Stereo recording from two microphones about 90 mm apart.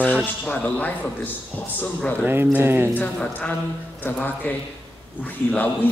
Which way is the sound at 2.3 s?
25° right (ahead or behind).